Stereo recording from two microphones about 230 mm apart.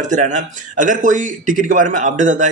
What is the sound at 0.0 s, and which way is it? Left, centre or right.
Speech, right.